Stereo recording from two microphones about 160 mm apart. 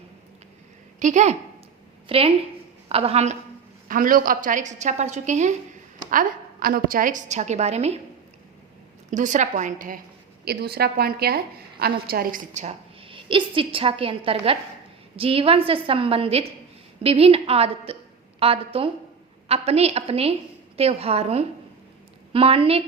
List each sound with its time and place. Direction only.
0.9 s a woman's voice: 50° right (ahead or behind)
2.0 s a woman's voice: 35° right (ahead or behind)
3.8 s a woman's voice: 60° right (ahead or behind)
6.1 s a woman's voice: 60° right (ahead or behind); by 7.9 s 40° right (ahead or behind)
9.0 s a woman's voice: 50° right (ahead or behind)
10.4 s a woman's voice: 80° right; by 12.6 s 60° right (ahead or behind)
12.6 s a woman's voice: 35° right (ahead or behind)